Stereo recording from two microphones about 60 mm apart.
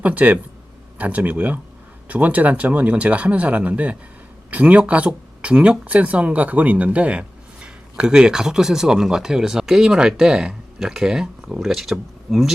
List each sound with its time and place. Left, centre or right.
0.0 s speech: right; by 12.5 s centre